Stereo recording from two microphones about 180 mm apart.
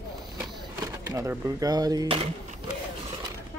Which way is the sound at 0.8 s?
15° right (ahead or behind).